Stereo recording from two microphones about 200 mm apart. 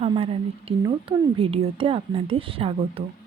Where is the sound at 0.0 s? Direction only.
30° right (ahead or behind).